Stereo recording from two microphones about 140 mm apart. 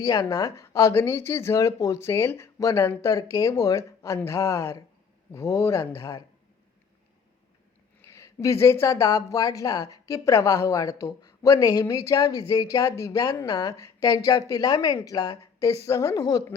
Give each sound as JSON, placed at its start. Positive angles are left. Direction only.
{"t": 0.0, "sound": "speech", "side_deg": 25}
{"t": 8.0, "sound": "speech", "side_deg": 20}